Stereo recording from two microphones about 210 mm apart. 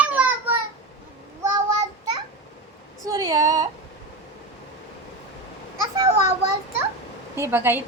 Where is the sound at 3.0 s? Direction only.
20° right (ahead or behind).